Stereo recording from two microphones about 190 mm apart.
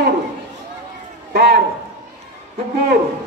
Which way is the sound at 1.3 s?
60° right (ahead or behind).